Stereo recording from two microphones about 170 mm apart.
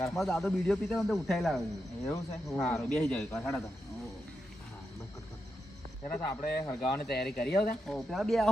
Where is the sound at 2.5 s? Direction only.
15° left (ahead or behind).